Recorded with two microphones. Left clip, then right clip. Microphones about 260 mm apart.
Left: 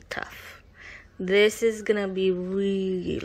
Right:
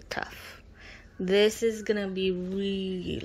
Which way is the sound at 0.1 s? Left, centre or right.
Centre.